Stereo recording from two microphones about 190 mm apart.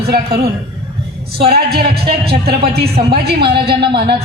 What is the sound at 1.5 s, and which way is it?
Speech, 55° right (ahead or behind).